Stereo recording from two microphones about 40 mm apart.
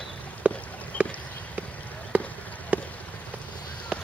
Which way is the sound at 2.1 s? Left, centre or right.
Right.